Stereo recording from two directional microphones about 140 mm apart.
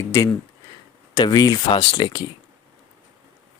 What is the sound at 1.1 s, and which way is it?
Speech, 30° left (ahead or behind).